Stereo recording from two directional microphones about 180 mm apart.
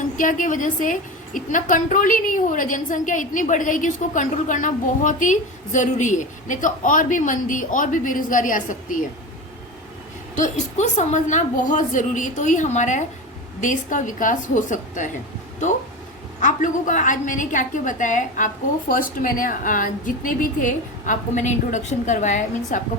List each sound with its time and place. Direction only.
0.2 s a woman's voice: 45° left (ahead or behind)
10.3 s a woman's voice: 40° left (ahead or behind)
16.4 s a woman's voice: 45° left (ahead or behind)